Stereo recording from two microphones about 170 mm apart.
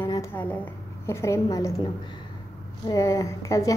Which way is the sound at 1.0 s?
15° left (ahead or behind).